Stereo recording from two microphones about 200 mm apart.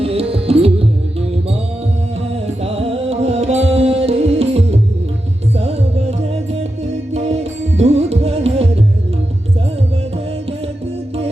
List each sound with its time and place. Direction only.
0.0 s music: 30° right (ahead or behind)
2.6 s music: 30° right (ahead or behind)